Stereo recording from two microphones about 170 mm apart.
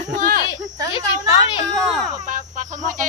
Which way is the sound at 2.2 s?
50° right (ahead or behind).